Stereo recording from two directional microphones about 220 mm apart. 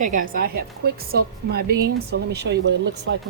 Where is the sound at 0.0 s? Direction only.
40° right (ahead or behind).